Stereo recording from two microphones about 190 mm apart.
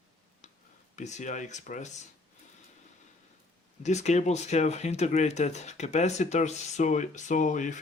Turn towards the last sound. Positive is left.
turn(degrees=40)  # may be behind; listen again after turning